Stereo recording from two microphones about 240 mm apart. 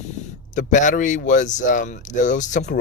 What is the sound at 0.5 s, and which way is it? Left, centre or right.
Speech, left.